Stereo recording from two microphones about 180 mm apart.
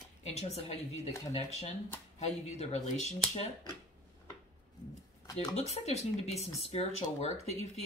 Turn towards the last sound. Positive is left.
turn(degrees=35)  # may be behind; listen again after turning